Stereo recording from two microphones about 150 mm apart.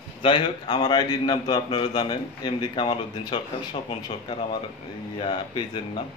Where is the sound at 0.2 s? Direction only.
35° left (ahead or behind).